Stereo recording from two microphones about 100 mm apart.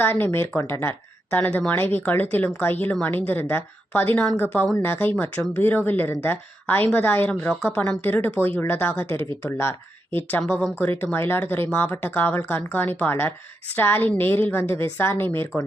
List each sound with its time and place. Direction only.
0.0 s speech: 20° left (ahead or behind)
7.3 s speech: 10° left (ahead or behind)
7.9 s speech: 20° left (ahead or behind)
10.4 s speech: 15° left (ahead or behind)